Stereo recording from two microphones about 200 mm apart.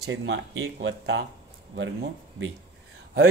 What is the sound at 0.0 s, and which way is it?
Speech, 70° right (ahead or behind).